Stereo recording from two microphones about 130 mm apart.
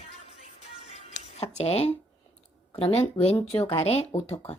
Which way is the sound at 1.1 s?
60° left (ahead or behind).